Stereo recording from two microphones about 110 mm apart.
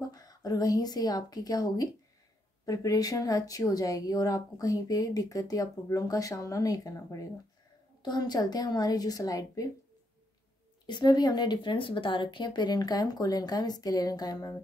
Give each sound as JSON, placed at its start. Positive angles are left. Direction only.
{"t": 0.0, "sound": "a woman's voice", "side_deg": 35}
{"t": 10.9, "sound": "speech", "side_deg": 40}